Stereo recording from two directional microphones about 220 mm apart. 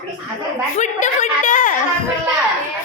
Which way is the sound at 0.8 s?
35° left (ahead or behind).